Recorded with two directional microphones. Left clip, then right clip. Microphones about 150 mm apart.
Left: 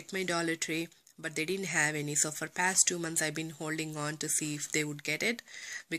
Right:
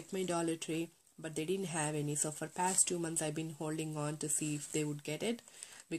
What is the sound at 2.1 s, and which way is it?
Speech, 20° left (ahead or behind).